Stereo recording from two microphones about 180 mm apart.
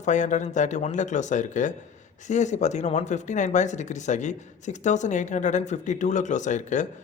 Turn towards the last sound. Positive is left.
turn(degrees=45)  # may be behind; listen again after turning